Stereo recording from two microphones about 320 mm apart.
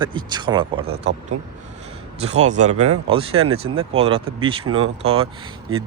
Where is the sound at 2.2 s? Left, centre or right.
Right.